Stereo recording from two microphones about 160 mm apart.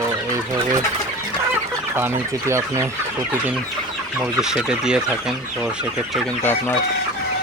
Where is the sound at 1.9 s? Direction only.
15° right (ahead or behind).